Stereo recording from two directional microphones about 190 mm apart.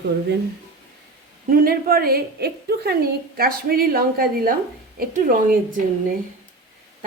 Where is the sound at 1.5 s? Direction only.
50° right (ahead or behind).